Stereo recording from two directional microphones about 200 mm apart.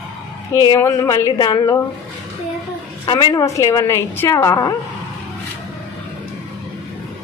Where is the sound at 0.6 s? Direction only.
15° left (ahead or behind).